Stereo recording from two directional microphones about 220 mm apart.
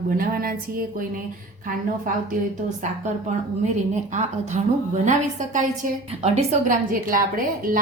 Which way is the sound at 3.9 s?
35° right (ahead or behind).